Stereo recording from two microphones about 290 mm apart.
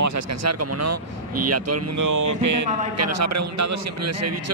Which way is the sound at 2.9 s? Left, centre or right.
Right.